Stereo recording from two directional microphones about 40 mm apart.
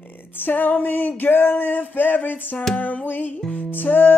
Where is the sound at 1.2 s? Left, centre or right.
Left.